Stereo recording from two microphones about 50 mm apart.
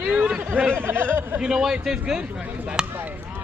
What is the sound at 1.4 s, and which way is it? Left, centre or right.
Speech, centre.